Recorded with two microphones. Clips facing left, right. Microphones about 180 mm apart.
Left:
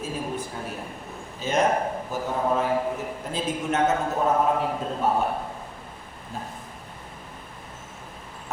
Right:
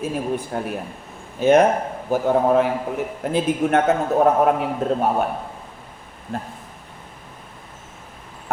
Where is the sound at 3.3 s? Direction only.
60° right (ahead or behind).